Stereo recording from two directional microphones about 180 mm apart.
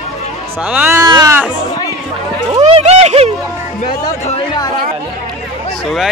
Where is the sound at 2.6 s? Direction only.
40° right (ahead or behind).